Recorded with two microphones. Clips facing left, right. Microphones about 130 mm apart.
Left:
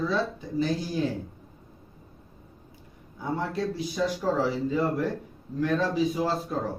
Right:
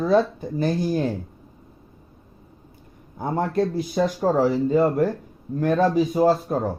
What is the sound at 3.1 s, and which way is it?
Speech, 50° right (ahead or behind).